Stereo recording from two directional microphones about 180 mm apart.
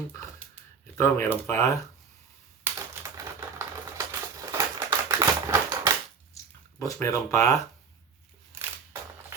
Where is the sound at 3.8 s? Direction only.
15° right (ahead or behind).